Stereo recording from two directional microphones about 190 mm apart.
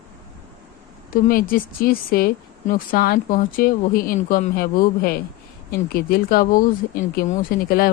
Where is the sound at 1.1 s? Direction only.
50° left (ahead or behind).